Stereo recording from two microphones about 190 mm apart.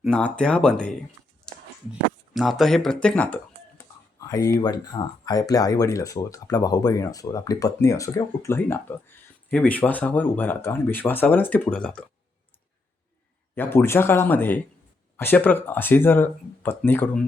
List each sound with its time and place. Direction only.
0.0 s speech: 5° left (ahead or behind)
4.2 s a sound: 20° left (ahead or behind)
4.6 s speech: 20° left (ahead or behind); by 12.0 s 5° left (ahead or behind)
13.6 s speech: 10° left (ahead or behind)